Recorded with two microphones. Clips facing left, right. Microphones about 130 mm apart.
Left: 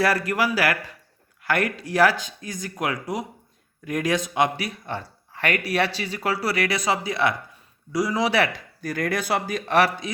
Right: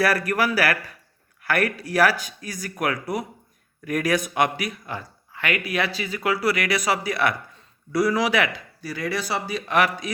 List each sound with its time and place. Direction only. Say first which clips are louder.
0.0 s speech: even; 20° left (ahead or behind)
8.8 s speech: left 2 dB; 50° left (ahead or behind)